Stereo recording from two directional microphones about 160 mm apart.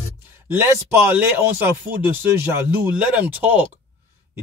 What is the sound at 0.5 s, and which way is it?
A man's voice, 15° right (ahead or behind).